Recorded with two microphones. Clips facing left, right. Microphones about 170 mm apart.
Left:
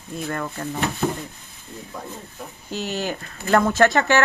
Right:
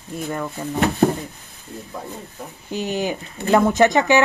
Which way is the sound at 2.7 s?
15° right (ahead or behind).